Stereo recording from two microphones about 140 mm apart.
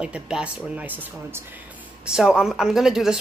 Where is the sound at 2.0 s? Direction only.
5° right (ahead or behind).